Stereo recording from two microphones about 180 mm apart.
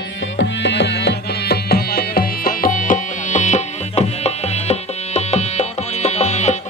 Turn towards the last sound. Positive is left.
turn(degrees=40)  # may be behind; listen again after turning